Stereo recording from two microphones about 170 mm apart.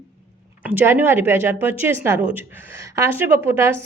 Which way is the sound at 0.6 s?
10° right (ahead or behind).